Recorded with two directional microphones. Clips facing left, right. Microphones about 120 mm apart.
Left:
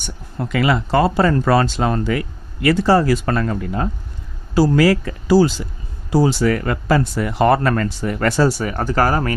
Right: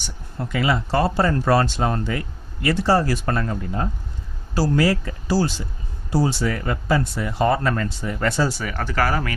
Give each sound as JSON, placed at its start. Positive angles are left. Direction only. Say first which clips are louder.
{"t": 0.4, "sound": "speech", "louder": "left 4 dB", "side_deg": 85}
{"t": 6.1, "sound": "speech", "louder": "left 6 dB", "side_deg": 80}
{"t": 8.6, "sound": "speech", "louder": "left 5 dB", "side_deg": 40}